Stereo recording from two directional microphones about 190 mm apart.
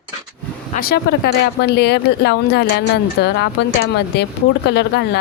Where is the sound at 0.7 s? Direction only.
55° left (ahead or behind).